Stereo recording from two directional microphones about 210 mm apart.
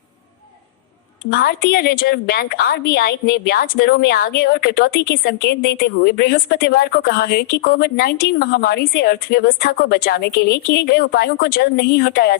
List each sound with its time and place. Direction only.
1.3 s a woman's voice: 45° left (ahead or behind)